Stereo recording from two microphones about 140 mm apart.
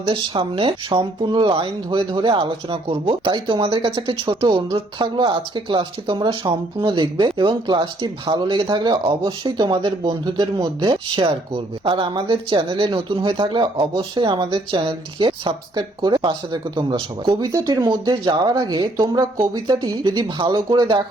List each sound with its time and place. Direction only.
0.0 s speech: 35° right (ahead or behind)